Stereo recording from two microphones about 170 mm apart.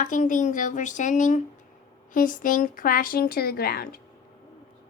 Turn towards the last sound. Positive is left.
turn(degrees=65)  # may be behind; listen again after turning